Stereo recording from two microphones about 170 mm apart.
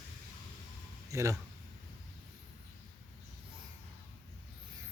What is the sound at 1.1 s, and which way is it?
Speech, 20° right (ahead or behind).